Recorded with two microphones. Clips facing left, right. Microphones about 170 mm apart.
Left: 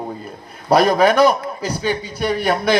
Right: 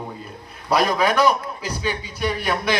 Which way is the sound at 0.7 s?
45° left (ahead or behind).